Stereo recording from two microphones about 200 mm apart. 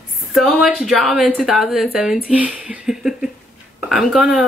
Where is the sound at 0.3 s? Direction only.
Centre (ahead or behind).